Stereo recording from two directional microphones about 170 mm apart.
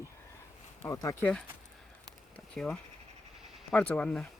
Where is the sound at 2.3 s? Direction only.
5° left (ahead or behind).